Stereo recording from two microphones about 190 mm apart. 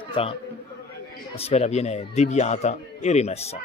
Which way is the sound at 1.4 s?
35° left (ahead or behind).